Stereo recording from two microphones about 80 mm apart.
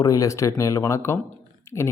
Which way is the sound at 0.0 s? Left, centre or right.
Left.